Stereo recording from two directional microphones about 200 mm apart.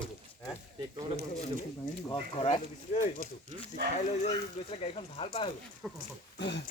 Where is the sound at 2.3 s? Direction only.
30° left (ahead or behind).